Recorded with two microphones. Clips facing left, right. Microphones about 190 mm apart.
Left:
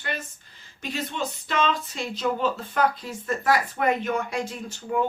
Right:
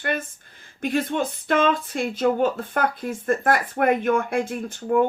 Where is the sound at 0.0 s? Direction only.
50° right (ahead or behind).